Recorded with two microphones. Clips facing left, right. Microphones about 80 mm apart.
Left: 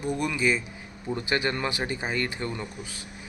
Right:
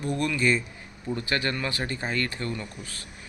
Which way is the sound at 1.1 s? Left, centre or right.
Centre.